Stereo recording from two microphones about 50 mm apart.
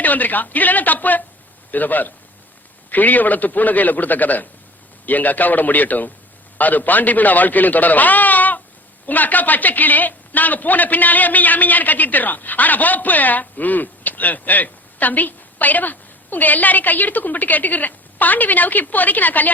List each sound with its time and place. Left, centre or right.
0.0 s a man's voice: left